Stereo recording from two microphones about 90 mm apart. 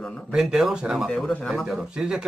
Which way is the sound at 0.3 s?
5° right (ahead or behind).